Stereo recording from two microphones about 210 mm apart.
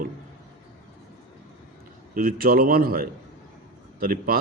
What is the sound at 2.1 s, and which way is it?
A man's voice, 45° right (ahead or behind).